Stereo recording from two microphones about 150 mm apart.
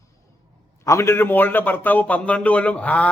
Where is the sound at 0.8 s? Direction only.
20° left (ahead or behind).